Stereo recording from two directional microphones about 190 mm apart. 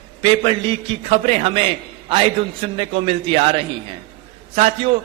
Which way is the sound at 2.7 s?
30° right (ahead or behind).